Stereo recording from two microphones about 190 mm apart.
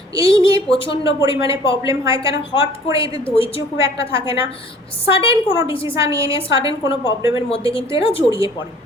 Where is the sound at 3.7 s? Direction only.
15° right (ahead or behind).